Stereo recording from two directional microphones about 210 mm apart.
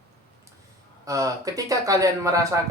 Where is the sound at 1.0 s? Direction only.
15° right (ahead or behind).